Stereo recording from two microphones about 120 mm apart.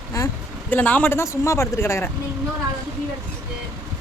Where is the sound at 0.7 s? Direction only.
10° left (ahead or behind).